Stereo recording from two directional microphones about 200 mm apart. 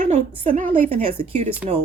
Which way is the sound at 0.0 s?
40° right (ahead or behind).